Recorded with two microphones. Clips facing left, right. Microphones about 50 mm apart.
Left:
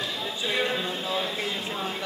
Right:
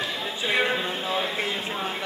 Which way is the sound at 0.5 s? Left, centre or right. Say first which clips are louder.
Right 3 dB; right.